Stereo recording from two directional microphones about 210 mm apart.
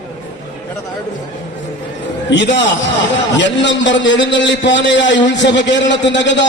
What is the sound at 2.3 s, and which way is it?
A man's voice, 55° left (ahead or behind).